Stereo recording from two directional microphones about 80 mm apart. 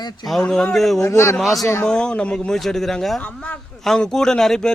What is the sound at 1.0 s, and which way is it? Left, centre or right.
Speech, left.